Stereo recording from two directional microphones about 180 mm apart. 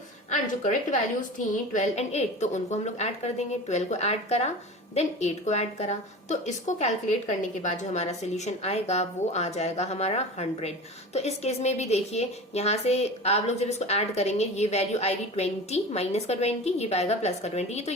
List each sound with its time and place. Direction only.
0.3 s a woman's voice: 45° left (ahead or behind)